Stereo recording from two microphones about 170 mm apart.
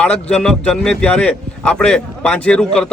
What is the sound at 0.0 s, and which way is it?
A man's voice, 5° left (ahead or behind).